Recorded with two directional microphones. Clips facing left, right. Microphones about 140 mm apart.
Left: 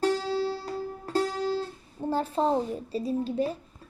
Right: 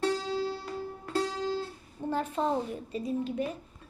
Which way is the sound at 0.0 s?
35° left (ahead or behind).